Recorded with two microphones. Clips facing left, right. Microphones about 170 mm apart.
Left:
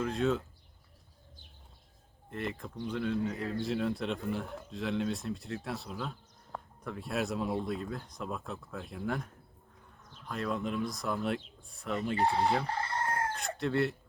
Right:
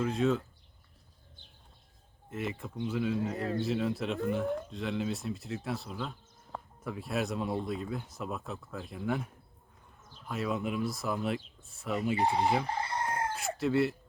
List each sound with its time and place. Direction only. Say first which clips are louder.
0.0 s speech: right 2 dB; centre (ahead or behind)
2.3 s speech: right 1 dB; 5° right (ahead or behind)
12.2 s chicken: left 1 dB; 15° right (ahead or behind)
13.3 s speech: right 3 dB; 5° right (ahead or behind)